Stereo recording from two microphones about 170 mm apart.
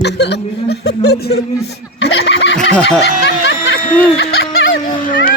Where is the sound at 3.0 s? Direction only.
90° left.